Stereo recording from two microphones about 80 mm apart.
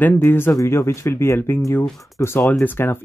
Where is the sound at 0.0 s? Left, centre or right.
Left.